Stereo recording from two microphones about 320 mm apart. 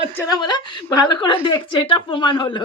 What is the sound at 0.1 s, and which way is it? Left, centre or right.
Speech, centre.